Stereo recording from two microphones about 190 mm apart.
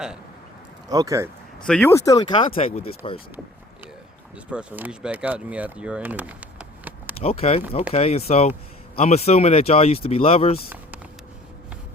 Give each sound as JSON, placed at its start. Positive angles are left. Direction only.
{"t": 0.9, "sound": "speech", "side_deg": -20}
{"t": 1.6, "sound": "speech", "side_deg": 5}
{"t": 1.9, "sound": "speech", "side_deg": 20}
{"t": 4.5, "sound": "speech", "side_deg": -5}
{"t": 7.2, "sound": "speech", "side_deg": 30}